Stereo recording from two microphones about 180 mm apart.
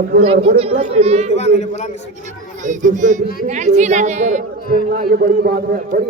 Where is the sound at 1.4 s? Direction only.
35° left (ahead or behind).